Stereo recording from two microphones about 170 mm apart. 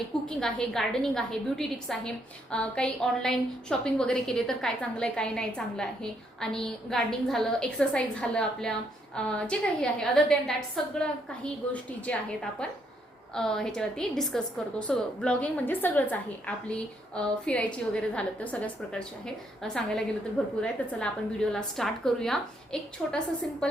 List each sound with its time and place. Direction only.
0.3 s a woman's voice: 5° left (ahead or behind)